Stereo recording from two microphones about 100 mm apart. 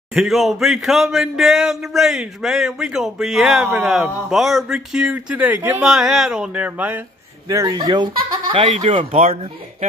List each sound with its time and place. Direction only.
0.1 s speech: 5° right (ahead or behind); by 5.8 s 20° right (ahead or behind)
5.8 s a sound: 5° right (ahead or behind)
7.4 s speech: 35° right (ahead or behind)
8.5 s speech: 60° right (ahead or behind); by 9.5 s 80° right